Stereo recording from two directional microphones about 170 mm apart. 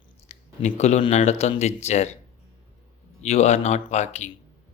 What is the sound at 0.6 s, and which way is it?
Speech, 40° left (ahead or behind).